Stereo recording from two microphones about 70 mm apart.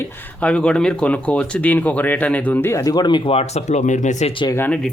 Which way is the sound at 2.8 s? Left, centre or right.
Left.